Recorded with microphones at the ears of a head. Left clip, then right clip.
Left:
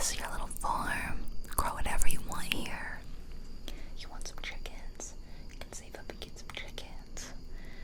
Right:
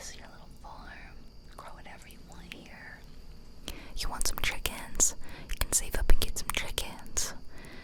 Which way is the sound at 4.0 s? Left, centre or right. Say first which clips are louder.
Right 11 dB; right.